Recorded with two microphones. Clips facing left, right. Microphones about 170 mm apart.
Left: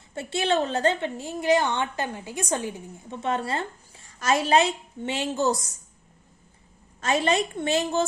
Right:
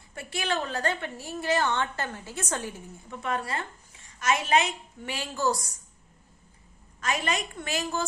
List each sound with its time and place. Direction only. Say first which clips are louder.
0.1 s a woman's voice: left 6 dB; 25° left (ahead or behind)
7.0 s a woman's voice: left 6 dB; 30° left (ahead or behind)